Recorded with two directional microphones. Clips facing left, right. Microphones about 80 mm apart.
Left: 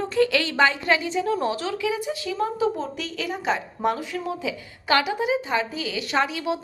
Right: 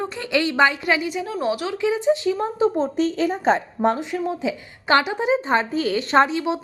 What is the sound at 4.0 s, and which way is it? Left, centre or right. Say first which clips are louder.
Speech: right 4 dB; right.